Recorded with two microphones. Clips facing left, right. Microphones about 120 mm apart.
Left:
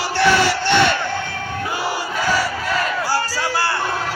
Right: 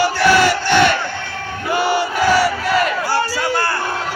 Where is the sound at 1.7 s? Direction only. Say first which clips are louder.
Right 9 dB; 65° right (ahead or behind).